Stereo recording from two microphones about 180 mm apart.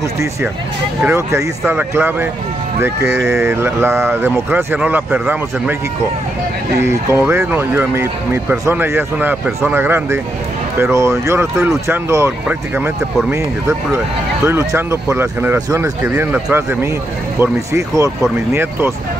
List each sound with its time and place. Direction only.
1.0 s speech: 15° right (ahead or behind)
6.8 s speech: 15° right (ahead or behind)